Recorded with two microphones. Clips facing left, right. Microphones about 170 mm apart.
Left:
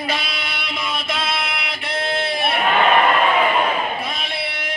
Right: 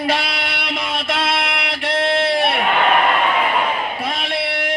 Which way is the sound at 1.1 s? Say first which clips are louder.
Right 6 dB; 75° right (ahead or behind).